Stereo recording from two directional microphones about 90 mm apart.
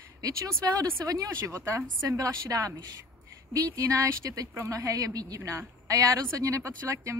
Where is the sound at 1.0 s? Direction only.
40° right (ahead or behind).